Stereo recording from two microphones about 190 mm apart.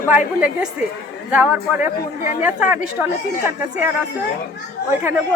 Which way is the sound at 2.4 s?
10° right (ahead or behind).